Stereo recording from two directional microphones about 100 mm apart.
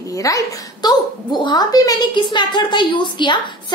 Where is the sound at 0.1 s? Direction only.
35° left (ahead or behind).